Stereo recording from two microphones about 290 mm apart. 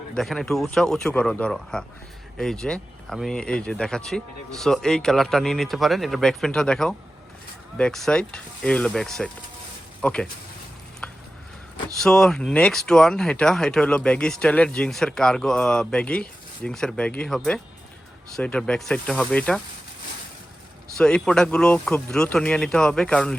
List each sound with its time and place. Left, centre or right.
0.2 s speech: centre
11.0 s a sound: centre
11.9 s speech: centre
21.0 s speech: centre